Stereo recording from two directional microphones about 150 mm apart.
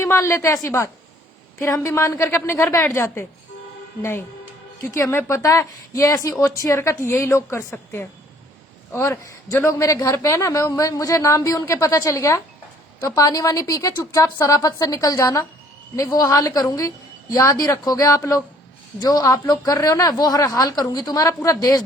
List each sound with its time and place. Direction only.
0.0 s a woman's voice: 15° left (ahead or behind)
4.8 s a woman's voice: 20° left (ahead or behind)